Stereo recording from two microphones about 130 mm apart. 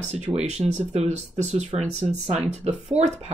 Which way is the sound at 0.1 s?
60° right (ahead or behind).